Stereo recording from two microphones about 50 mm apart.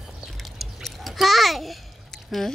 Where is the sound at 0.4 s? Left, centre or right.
Centre.